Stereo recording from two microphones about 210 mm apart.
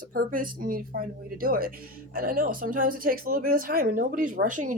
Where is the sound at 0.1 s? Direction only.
40° right (ahead or behind).